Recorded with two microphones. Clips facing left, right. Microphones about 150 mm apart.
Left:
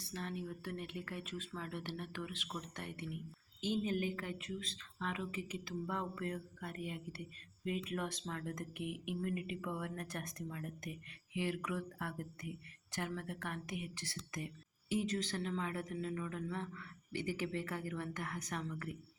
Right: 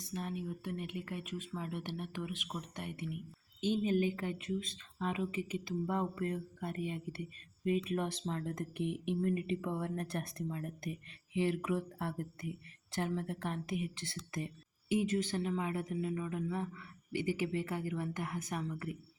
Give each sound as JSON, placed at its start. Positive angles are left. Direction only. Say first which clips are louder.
{"t": 0.1, "sound": "a man's voice", "louder": "right 3 dB", "side_deg": -15}